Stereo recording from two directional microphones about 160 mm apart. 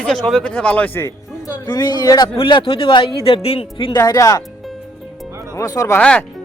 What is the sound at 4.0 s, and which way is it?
Speech, 20° left (ahead or behind).